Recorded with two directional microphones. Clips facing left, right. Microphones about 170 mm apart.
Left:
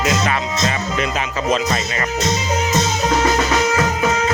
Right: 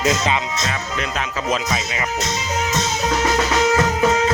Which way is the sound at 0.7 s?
5° left (ahead or behind).